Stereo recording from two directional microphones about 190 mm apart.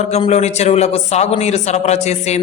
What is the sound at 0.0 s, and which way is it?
Speech, 35° left (ahead or behind).